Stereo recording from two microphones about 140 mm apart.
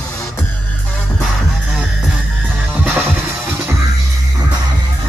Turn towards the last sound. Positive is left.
turn(degrees=-10)  # may be behind; listen again after turning